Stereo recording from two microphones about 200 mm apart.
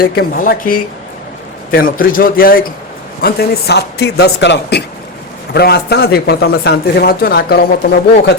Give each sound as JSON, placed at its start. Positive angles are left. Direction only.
{"t": 0.0, "sound": "a man's voice", "side_deg": 45}